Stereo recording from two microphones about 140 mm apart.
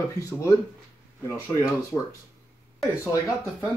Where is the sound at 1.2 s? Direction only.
20° left (ahead or behind).